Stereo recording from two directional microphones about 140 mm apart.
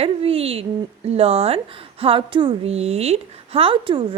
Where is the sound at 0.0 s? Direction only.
45° right (ahead or behind).